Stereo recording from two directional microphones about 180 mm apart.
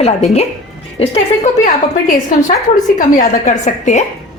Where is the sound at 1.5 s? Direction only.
40° left (ahead or behind).